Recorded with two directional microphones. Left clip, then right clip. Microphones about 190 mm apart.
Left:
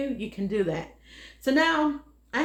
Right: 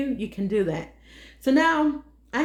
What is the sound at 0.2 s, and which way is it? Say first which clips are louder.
A woman's voice: right 3 dB; 30° right (ahead or behind).